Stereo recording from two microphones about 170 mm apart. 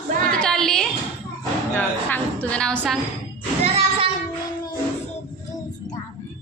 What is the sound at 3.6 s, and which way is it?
Child singing, 35° right (ahead or behind).